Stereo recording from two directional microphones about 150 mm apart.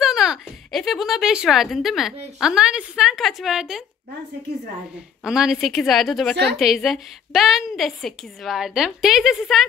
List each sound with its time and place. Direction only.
0.0 s a woman's voice: 5° right (ahead or behind)
5.2 s a woman's voice: 5° right (ahead or behind)